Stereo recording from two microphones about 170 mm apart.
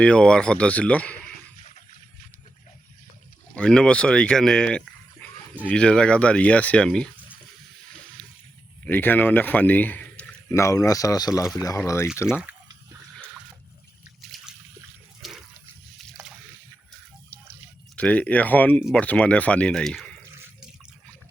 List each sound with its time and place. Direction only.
0.0 s a man's voice: 5° left (ahead or behind)
3.5 s speech: 5° left (ahead or behind)
8.9 s a man's voice: 10° left (ahead or behind)
14.3 s trickle: centre (ahead or behind)
15.2 s water: centre (ahead or behind)
17.9 s a man's voice: 10° left (ahead or behind)